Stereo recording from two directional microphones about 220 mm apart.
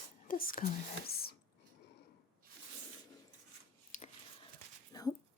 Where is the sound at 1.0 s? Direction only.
45° left (ahead or behind).